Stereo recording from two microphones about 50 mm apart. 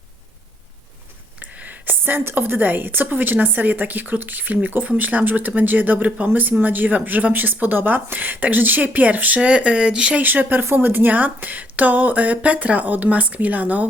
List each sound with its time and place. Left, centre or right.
1.4 s a woman's voice: right
9.4 s speech: right
10.2 s a woman's voice: right